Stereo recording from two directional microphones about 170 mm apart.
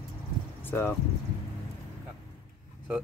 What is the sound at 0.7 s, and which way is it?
Speech, 15° left (ahead or behind).